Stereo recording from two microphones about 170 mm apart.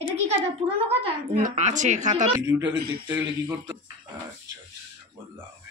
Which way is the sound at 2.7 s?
65° right (ahead or behind).